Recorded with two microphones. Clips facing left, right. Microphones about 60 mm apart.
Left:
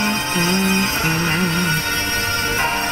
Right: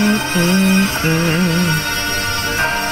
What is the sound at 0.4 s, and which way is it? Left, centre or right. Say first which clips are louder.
Music: right 4 dB; left.